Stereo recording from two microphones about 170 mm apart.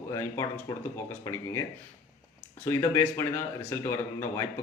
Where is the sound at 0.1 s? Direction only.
15° left (ahead or behind).